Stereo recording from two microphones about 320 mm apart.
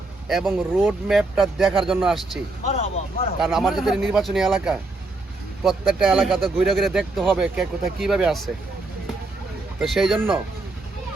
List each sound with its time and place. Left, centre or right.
0.3 s speech: centre
2.7 s speech: centre
3.4 s speech: centre
9.7 s speech: centre